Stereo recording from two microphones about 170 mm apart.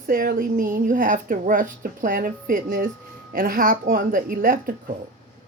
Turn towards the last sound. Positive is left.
turn(degrees=-55)  # may be behind; listen again after turning